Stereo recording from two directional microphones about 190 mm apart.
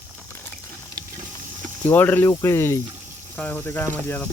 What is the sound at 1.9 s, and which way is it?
Speech, 10° left (ahead or behind).